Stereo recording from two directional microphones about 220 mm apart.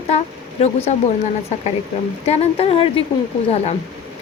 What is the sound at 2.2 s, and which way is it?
A woman's voice, 30° left (ahead or behind).